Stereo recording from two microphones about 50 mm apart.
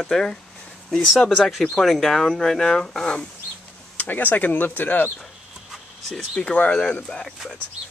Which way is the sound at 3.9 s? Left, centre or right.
Left.